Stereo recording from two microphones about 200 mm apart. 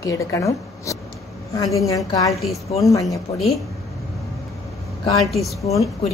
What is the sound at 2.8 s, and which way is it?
Speech, 15° left (ahead or behind).